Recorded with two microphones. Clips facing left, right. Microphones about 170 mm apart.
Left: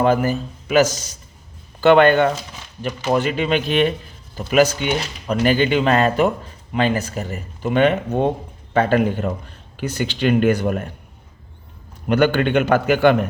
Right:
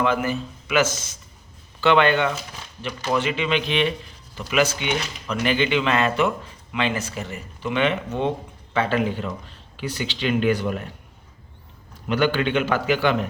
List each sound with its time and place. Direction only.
0.0 s a man's voice: 40° left (ahead or behind)
12.0 s speech: 50° left (ahead or behind)